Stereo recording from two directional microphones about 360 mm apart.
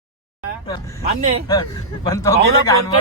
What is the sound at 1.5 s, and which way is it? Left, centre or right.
A man's voice, centre.